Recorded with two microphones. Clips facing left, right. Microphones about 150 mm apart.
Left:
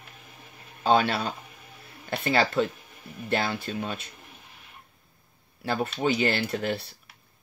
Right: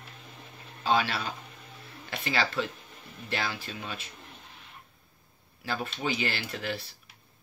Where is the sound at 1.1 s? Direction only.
55° left (ahead or behind).